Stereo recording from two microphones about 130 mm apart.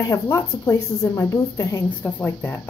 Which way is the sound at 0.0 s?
25° left (ahead or behind).